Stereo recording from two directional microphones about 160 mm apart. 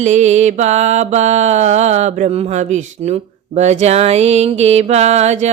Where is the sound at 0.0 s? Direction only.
45° right (ahead or behind).